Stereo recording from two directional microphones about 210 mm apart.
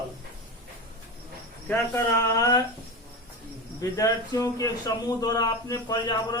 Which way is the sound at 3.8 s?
15° left (ahead or behind).